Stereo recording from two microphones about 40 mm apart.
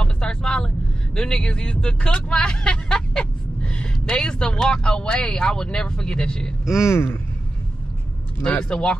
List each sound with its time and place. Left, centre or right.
0.0 s vehicle: left
4.6 s speech: centre
6.6 s speech: centre
8.5 s speech: left